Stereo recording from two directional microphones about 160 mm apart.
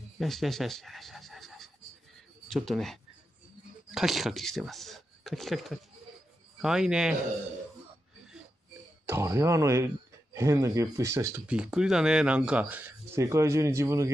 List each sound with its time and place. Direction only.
0.2 s a man's voice: centre (ahead or behind)
9.0 s speech: 15° right (ahead or behind)
11.4 s speech: 5° right (ahead or behind)